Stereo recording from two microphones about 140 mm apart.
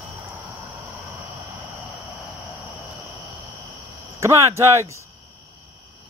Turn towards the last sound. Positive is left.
turn(degrees=-20)  # may be behind; listen again after turning